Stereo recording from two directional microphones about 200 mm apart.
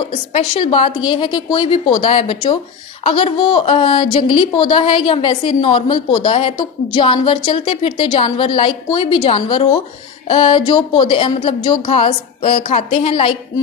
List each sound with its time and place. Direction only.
0.0 s speech: 25° left (ahead or behind)